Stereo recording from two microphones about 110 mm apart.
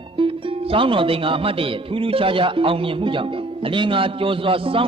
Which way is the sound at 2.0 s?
55° right (ahead or behind).